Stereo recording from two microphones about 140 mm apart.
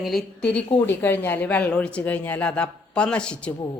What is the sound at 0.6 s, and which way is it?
Speech, 40° left (ahead or behind).